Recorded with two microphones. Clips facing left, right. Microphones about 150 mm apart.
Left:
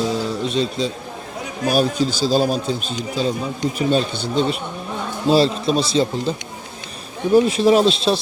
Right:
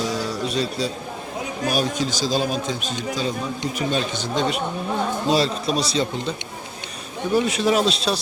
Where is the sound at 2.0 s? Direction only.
30° left (ahead or behind).